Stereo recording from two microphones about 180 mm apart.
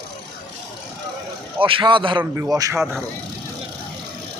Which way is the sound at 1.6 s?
30° right (ahead or behind).